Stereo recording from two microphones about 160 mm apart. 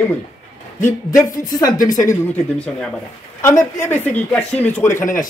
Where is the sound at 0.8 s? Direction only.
20° left (ahead or behind).